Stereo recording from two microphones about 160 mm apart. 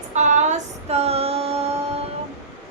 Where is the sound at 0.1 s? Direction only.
45° right (ahead or behind).